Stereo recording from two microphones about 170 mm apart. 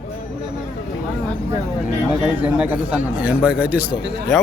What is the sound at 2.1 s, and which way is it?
A man's voice, 5° right (ahead or behind).